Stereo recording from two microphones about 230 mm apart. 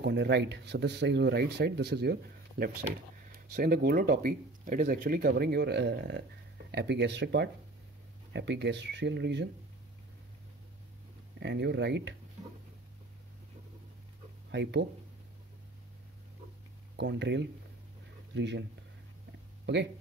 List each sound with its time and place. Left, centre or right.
0.0 s speech: right
11.3 s speech: right
14.5 s speech: right
16.9 s speech: right